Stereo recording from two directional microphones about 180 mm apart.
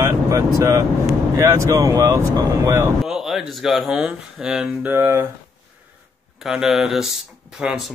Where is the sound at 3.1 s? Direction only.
Centre (ahead or behind).